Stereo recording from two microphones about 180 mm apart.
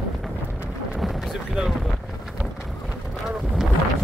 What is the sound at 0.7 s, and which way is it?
Boat, centre (ahead or behind).